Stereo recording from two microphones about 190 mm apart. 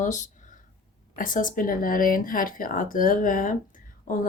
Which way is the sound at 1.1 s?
45° left (ahead or behind).